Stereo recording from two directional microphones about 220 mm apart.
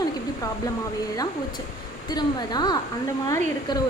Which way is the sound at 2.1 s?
20° left (ahead or behind).